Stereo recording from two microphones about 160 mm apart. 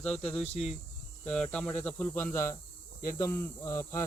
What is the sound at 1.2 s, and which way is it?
Speech, 5° left (ahead or behind).